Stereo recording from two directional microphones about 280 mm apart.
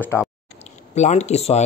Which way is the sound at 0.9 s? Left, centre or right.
Left.